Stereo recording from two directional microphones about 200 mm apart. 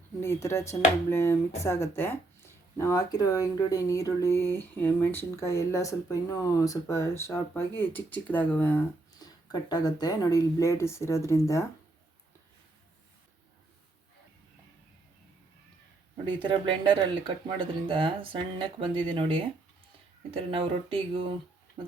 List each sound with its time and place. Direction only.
0.2 s speech: 15° left (ahead or behind)
16.4 s speech: 25° right (ahead or behind)